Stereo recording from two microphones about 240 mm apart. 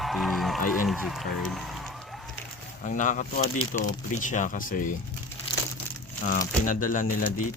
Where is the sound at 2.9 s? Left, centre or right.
Left.